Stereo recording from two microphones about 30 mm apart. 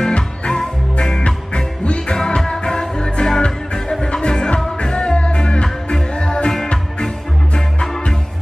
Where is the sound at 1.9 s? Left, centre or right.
Left.